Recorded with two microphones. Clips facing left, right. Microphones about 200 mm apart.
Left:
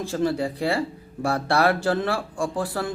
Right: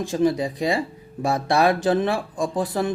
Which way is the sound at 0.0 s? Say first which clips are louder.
Right 3 dB; 15° right (ahead or behind).